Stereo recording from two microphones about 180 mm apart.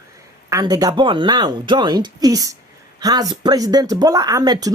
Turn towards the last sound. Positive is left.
turn(degrees=-20)  # may be behind; listen again after turning